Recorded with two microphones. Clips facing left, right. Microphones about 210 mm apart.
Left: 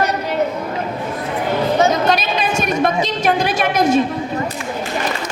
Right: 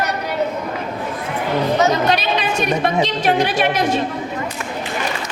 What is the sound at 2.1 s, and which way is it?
A woman's voice, 45° left (ahead or behind).